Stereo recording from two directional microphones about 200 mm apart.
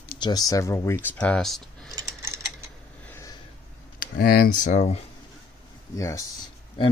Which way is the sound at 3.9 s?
45° left (ahead or behind).